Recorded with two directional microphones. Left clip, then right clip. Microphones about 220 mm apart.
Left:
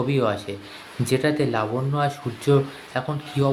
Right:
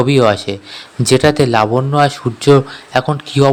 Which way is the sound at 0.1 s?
45° right (ahead or behind).